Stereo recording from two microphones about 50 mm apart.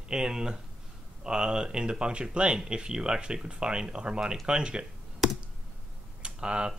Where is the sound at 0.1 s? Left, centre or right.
Centre.